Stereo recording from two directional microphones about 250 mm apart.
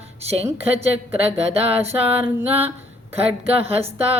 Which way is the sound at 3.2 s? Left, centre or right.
Right.